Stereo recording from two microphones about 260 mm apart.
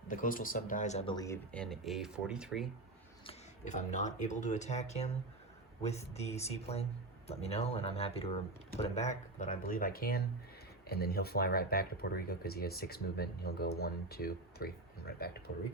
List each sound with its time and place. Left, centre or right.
0.1 s speech: left; by 2.6 s centre
3.2 s speech: left